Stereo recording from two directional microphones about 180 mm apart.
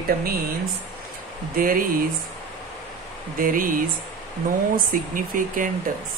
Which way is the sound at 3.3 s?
50° right (ahead or behind).